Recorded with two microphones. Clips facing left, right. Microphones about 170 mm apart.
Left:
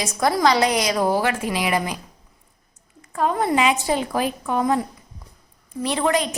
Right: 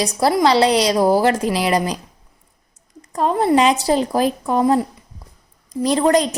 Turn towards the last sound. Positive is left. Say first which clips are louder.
# right 6 dB
turn(degrees=-35)  # may be behind; listen again after turning